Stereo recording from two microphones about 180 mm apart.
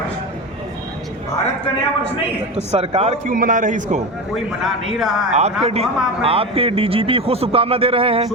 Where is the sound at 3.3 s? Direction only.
50° right (ahead or behind).